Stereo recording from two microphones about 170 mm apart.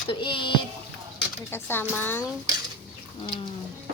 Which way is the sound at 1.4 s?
10° left (ahead or behind).